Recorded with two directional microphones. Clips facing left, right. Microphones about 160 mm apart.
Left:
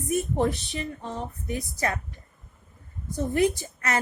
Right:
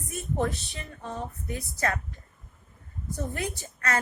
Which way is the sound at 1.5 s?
20° left (ahead or behind).